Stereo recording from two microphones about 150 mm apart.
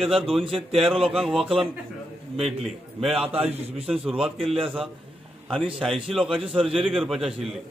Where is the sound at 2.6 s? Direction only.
Centre (ahead or behind).